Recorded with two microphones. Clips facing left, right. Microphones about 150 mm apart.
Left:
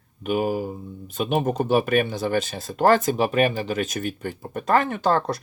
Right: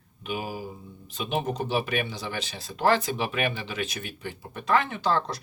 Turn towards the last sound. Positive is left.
turn(degrees=50)  # may be behind; listen again after turning